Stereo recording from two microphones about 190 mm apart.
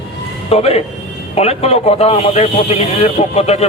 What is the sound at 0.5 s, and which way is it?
Speech, 30° left (ahead or behind).